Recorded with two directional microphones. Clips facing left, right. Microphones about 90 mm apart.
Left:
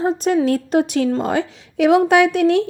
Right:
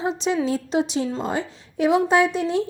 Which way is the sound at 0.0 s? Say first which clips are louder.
Left 5 dB; 45° left (ahead or behind).